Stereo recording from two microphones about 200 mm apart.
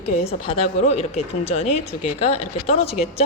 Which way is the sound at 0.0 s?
30° left (ahead or behind).